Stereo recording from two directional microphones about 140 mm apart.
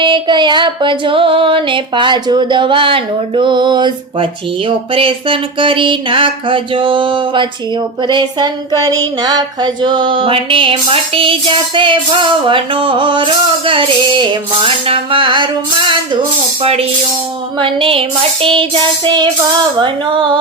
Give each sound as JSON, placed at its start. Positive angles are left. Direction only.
{"t": 0.0, "sound": "female singing", "side_deg": -35}
{"t": 17.6, "sound": "female singing", "side_deg": -40}